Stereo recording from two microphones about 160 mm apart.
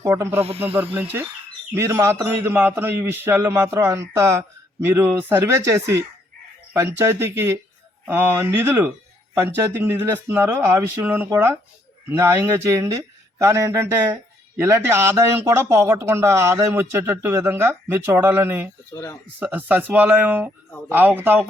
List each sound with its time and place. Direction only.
0.0 s speech: 15° right (ahead or behind)